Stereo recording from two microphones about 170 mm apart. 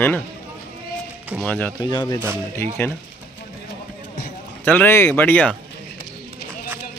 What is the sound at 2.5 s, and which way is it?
Speech, 15° left (ahead or behind).